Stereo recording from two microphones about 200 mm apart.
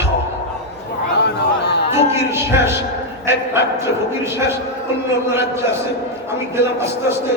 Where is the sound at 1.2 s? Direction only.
60° left (ahead or behind).